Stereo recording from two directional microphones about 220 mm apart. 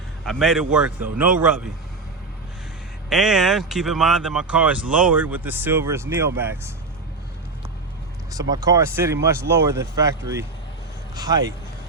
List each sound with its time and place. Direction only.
0.3 s speech: centre (ahead or behind)
3.1 s speech: centre (ahead or behind)
8.3 s speech: 15° right (ahead or behind)